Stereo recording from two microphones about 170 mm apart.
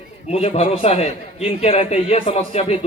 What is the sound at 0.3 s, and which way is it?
A man's voice, 35° left (ahead or behind).